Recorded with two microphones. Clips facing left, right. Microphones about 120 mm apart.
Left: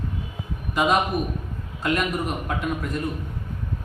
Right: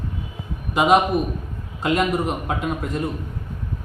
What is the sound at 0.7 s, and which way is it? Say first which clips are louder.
A man's voice: right 5 dB; 25° right (ahead or behind).